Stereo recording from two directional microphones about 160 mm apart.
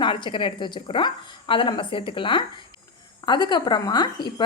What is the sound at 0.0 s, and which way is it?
A woman's voice, 30° left (ahead or behind).